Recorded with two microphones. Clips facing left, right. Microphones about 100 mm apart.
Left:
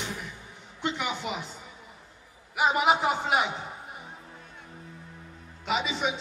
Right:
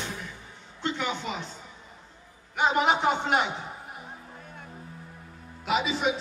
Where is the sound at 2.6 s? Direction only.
5° left (ahead or behind).